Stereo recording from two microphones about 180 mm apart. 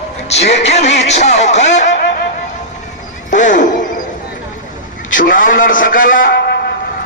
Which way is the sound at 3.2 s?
45° left (ahead or behind).